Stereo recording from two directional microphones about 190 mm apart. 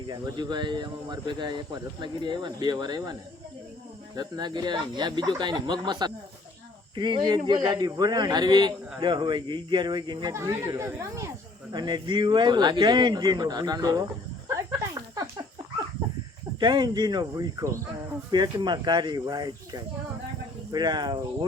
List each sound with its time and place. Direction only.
0.1 s a man's voice: 20° right (ahead or behind)
14.4 s a sound: 15° right (ahead or behind)
16.6 s a man's voice: 20° right (ahead or behind)